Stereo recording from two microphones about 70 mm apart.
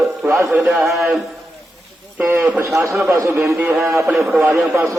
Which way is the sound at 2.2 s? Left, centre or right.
Right.